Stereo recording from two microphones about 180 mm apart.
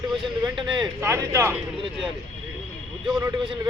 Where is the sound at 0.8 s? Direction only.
15° right (ahead or behind).